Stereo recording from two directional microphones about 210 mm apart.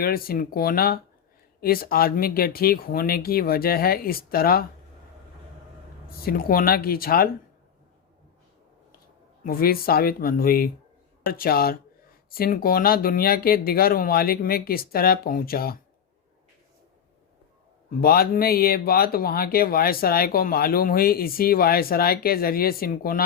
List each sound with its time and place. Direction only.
0.0 s speech: 45° left (ahead or behind)
6.2 s speech: 45° left (ahead or behind)
9.4 s speech: 45° left (ahead or behind)
18.0 s speech: 45° left (ahead or behind)